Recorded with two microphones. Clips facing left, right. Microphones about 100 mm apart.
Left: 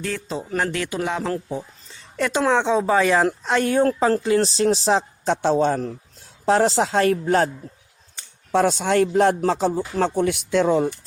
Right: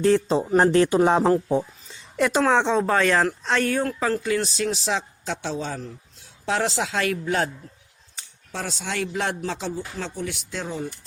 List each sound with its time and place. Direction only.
0.0 s speech: 30° right (ahead or behind)
2.1 s speech: centre (ahead or behind)
3.6 s speech: 20° left (ahead or behind)
3.8 s speech: 40° left (ahead or behind)
6.4 s speech: 40° left (ahead or behind)
8.5 s speech: 55° left (ahead or behind)
9.9 s speech: 60° left (ahead or behind); by 10.9 s 75° left (ahead or behind)